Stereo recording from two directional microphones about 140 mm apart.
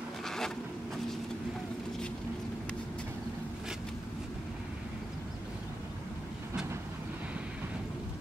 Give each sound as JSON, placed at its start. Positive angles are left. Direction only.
{"t": 0.2, "sound": "insect", "side_deg": 5}